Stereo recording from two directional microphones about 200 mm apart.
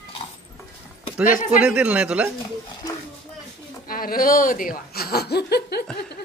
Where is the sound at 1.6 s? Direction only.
5° right (ahead or behind).